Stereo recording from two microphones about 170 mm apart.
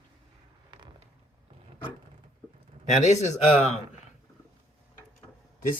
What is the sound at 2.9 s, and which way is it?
Speech, 40° left (ahead or behind).